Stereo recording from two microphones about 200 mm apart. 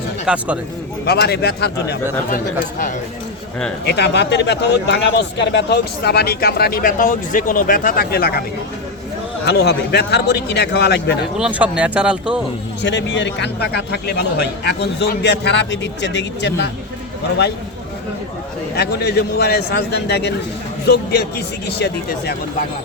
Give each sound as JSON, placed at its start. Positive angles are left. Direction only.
{"t": 0.3, "sound": "speech", "side_deg": -5}
{"t": 1.0, "sound": "a man's voice", "side_deg": 55}
{"t": 2.3, "sound": "speech", "side_deg": 40}
{"t": 3.8, "sound": "speech", "side_deg": 55}
{"t": 9.5, "sound": "a man's voice", "side_deg": 55}
{"t": 11.3, "sound": "speech", "side_deg": -5}
{"t": 12.8, "sound": "a man's voice", "side_deg": 60}
{"t": 18.8, "sound": "a man's voice", "side_deg": 55}